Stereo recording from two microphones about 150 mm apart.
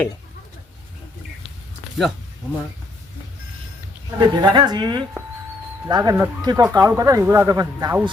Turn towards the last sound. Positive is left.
turn(degrees=-25)  # may be behind; listen again after turning